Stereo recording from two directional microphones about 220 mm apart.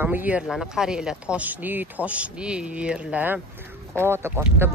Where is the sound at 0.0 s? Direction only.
10° right (ahead or behind).